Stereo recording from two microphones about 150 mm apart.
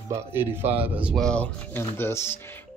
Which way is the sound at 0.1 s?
15° right (ahead or behind).